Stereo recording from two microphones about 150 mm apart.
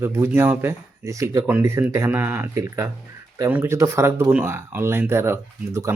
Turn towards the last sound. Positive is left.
turn(degrees=-20)  # may be behind; listen again after turning